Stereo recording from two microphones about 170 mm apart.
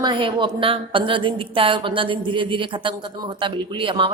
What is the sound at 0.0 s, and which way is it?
A woman's voice, 30° right (ahead or behind).